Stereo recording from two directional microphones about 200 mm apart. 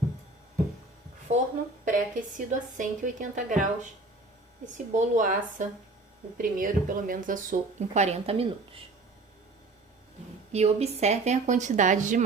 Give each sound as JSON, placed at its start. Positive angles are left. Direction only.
{"t": 1.8, "sound": "speech", "side_deg": -40}
{"t": 10.5, "sound": "speech", "side_deg": -30}